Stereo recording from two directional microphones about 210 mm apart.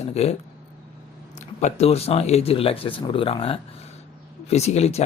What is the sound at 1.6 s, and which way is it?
Speech, 30° left (ahead or behind).